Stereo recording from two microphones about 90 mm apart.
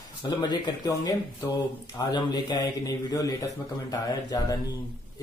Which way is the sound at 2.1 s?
50° left (ahead or behind).